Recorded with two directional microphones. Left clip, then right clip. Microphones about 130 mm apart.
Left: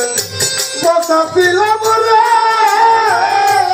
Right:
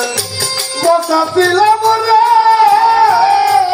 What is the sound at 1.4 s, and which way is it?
Music, 15° right (ahead or behind).